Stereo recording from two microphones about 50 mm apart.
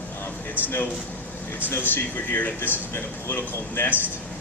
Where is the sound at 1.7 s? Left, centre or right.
Left.